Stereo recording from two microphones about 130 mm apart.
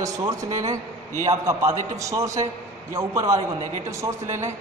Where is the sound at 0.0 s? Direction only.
25° right (ahead or behind).